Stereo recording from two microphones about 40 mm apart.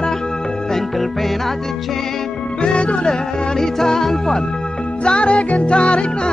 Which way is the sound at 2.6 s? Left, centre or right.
Left.